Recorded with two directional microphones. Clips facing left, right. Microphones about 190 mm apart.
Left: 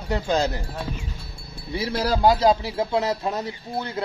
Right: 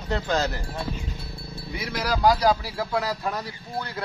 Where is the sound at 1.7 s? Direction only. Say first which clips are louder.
Left 4 dB; 30° left (ahead or behind).